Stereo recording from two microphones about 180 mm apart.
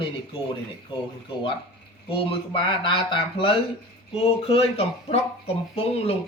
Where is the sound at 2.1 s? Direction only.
30° left (ahead or behind).